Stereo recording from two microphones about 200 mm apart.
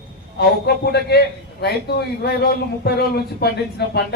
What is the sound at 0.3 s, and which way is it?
A man's voice, 55° left (ahead or behind).